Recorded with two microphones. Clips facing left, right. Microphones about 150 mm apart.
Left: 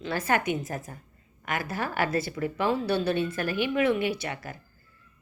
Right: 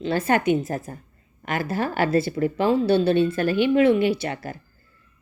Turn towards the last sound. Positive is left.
turn(degrees=-30)  # may be behind; listen again after turning